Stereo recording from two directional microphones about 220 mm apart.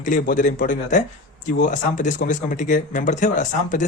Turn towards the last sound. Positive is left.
turn(degrees=35)  # may be behind; listen again after turning